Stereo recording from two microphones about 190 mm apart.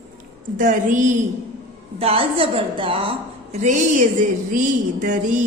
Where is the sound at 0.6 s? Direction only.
45° right (ahead or behind).